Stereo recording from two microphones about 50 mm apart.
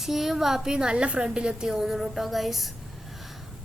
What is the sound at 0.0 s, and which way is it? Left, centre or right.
A woman's voice, centre.